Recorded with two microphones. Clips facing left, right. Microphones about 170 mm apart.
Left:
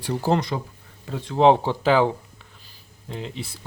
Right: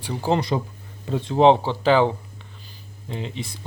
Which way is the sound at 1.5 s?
10° left (ahead or behind).